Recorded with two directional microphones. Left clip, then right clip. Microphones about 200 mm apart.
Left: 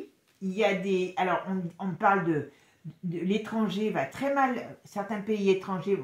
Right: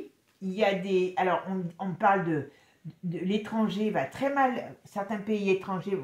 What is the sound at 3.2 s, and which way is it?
Speech, 30° right (ahead or behind).